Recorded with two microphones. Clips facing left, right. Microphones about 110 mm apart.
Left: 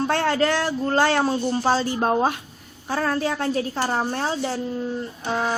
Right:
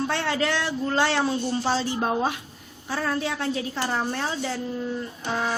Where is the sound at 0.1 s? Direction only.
45° left (ahead or behind).